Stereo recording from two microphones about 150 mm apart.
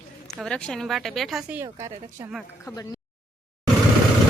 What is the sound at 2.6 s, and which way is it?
Speech, 25° left (ahead or behind).